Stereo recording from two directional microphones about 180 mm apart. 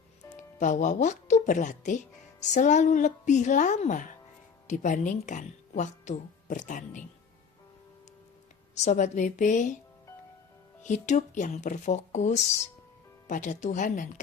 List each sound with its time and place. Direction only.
0.3 s speech: 45° left (ahead or behind)
8.8 s speech: 40° left (ahead or behind)
10.8 s speech: 40° left (ahead or behind)